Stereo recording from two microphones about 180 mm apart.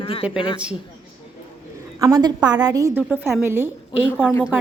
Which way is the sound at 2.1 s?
25° right (ahead or behind).